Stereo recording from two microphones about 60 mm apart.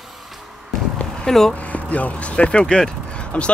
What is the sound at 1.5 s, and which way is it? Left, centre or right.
Speech, left.